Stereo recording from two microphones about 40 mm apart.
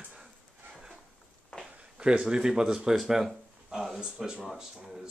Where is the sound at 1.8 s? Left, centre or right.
Right.